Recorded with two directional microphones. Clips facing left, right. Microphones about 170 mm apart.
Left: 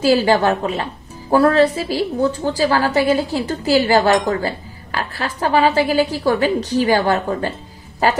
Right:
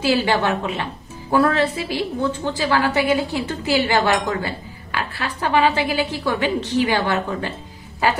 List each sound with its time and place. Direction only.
0.0 s a woman's voice: 40° left (ahead or behind)